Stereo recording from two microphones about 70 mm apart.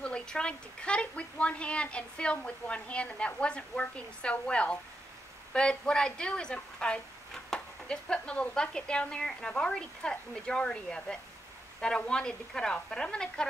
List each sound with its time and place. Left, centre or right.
0.0 s speech: centre